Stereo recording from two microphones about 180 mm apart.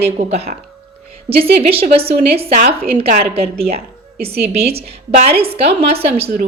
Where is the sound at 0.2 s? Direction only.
35° right (ahead or behind).